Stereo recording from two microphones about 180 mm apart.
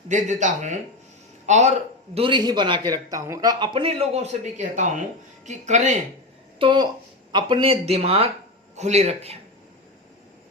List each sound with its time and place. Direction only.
0.1 s a man's voice: 40° right (ahead or behind)
6.6 s speech: 25° right (ahead or behind)